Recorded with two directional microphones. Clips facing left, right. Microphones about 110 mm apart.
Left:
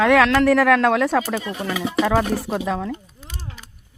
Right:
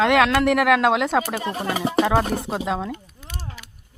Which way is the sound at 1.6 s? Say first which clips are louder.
Right 2 dB; 45° right (ahead or behind).